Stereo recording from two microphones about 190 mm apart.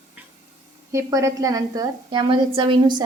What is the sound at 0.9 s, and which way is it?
A woman's voice, 15° right (ahead or behind).